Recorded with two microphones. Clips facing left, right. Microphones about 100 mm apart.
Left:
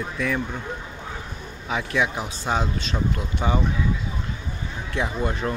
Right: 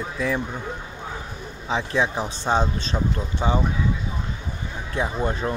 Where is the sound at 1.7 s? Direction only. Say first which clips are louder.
Right 1 dB; 30° right (ahead or behind).